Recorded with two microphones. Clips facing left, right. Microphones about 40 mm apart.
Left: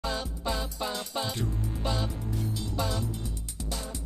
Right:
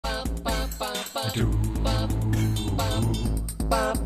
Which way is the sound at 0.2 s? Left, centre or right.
Right.